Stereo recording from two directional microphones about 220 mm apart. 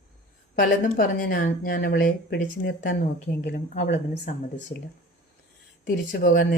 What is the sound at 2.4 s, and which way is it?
Speech, 50° left (ahead or behind).